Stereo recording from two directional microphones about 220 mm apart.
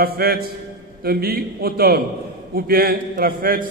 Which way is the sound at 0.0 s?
45° right (ahead or behind).